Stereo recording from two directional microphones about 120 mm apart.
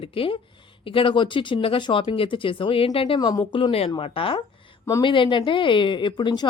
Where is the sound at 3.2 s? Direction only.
35° left (ahead or behind).